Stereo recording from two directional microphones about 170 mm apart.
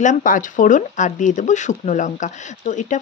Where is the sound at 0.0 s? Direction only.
50° left (ahead or behind).